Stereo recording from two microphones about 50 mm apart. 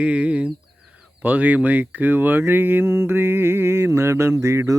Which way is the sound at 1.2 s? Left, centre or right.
Right.